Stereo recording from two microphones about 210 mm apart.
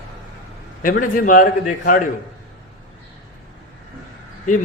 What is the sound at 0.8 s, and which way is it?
A man's voice, 40° left (ahead or behind).